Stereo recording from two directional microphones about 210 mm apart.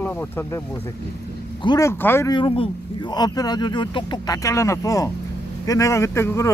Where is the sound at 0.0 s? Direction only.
10° left (ahead or behind).